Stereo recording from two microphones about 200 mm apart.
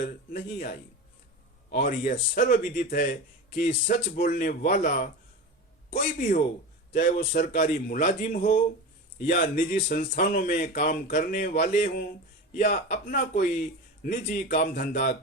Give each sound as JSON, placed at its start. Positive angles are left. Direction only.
{"t": 0.0, "sound": "speech", "side_deg": 45}